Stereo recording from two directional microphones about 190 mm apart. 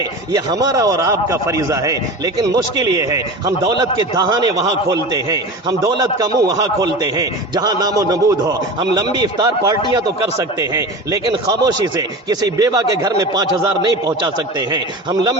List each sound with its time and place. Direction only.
0.3 s a man's voice: 20° right (ahead or behind)